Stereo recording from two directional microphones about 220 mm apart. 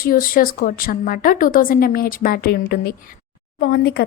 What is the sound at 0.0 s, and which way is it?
Speech, 40° left (ahead or behind).